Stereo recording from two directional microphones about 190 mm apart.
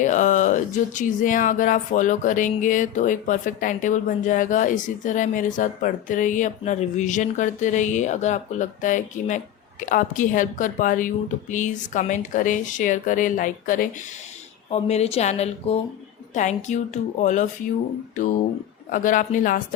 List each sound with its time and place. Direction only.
0.0 s speech: 40° left (ahead or behind)
14.7 s a woman's voice: 35° left (ahead or behind)
18.9 s speech: 45° left (ahead or behind)